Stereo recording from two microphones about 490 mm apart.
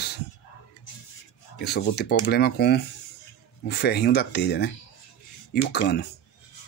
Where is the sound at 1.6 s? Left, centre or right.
Centre.